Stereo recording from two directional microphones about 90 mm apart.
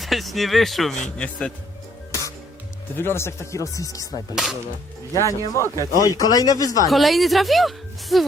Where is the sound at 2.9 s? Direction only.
25° left (ahead or behind).